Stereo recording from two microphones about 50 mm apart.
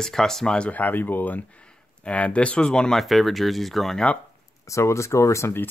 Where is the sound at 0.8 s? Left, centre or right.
Left.